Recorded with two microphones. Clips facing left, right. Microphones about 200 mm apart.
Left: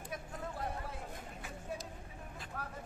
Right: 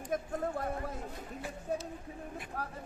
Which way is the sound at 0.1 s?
45° right (ahead or behind).